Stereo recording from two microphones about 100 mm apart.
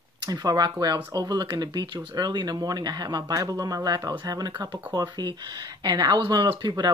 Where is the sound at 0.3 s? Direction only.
45° right (ahead or behind).